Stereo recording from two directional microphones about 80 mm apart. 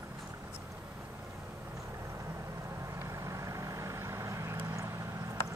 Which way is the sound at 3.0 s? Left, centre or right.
Right.